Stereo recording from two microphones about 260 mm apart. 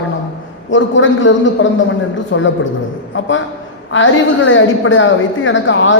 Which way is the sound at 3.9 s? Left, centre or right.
Left.